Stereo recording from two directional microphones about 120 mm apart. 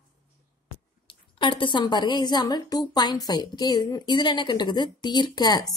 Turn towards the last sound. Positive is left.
turn(degrees=35)  # may be behind; listen again after turning